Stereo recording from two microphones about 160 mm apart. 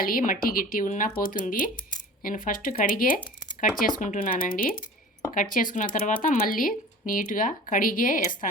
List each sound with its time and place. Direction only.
0.0 s speech: 60° left (ahead or behind)